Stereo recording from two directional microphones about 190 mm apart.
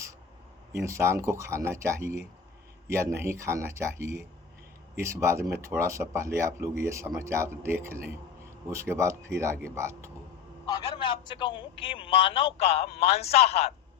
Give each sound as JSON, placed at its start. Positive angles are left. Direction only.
{"t": 0.7, "sound": "speech", "side_deg": -15}
{"t": 10.7, "sound": "a man's voice", "side_deg": 25}